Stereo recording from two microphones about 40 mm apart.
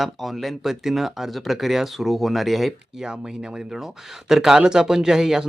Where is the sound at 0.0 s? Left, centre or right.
Centre.